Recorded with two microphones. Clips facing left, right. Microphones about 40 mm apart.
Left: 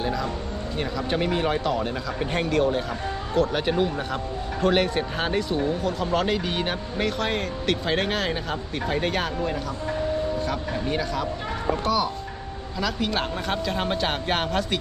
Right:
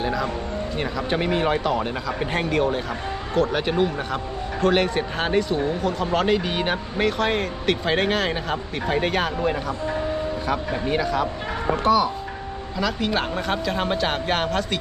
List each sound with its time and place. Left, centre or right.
0.0 s music: centre
0.8 s speech: centre
10.4 s speech: centre